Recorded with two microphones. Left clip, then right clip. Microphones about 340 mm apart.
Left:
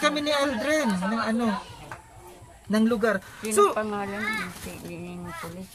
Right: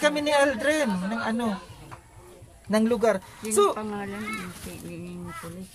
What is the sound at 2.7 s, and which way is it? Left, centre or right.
Speech, centre.